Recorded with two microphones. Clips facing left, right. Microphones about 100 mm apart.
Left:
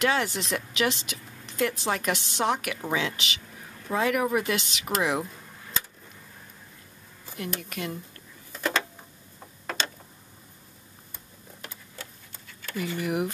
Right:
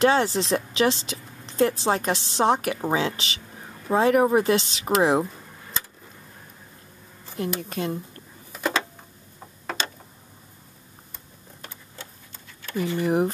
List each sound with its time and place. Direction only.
0.0 s a woman's voice: 30° right (ahead or behind)
7.3 s a woman's voice: 30° right (ahead or behind)
8.5 s a sound: 5° right (ahead or behind)
12.7 s a woman's voice: 30° right (ahead or behind)